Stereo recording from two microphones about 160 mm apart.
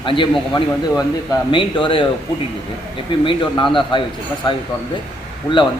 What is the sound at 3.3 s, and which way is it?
A man's voice, 30° left (ahead or behind).